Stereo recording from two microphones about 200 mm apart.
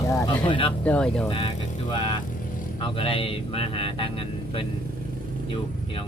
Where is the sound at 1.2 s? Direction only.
25° left (ahead or behind).